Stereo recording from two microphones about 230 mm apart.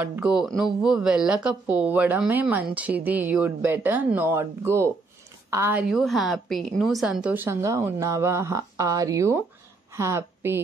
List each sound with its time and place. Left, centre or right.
0.0 s a woman's voice: centre